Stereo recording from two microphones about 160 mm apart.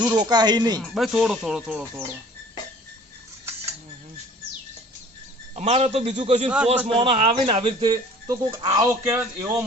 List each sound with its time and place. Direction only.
0.0 s speech: 25° right (ahead or behind)
0.8 s speech: centre (ahead or behind)
5.5 s speech: 45° right (ahead or behind); by 9.6 s 15° right (ahead or behind)